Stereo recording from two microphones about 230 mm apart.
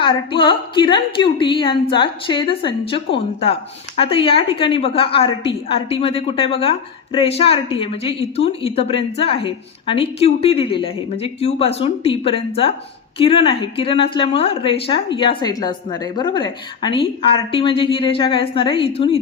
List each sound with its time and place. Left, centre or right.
0.0 s a woman's voice: left